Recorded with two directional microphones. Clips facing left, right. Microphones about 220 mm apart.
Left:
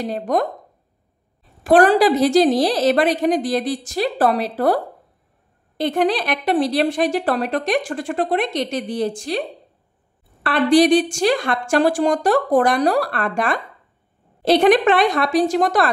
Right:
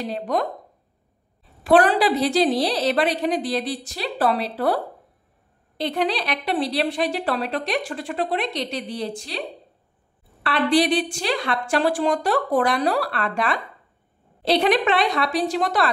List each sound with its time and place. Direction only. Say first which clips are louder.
0.0 s speech: left 4 dB; 45° left (ahead or behind)
1.6 s speech: left 4 dB; 45° left (ahead or behind)
5.8 s speech: left 5 dB; 50° left (ahead or behind)
10.4 s speech: left 5 dB; 45° left (ahead or behind)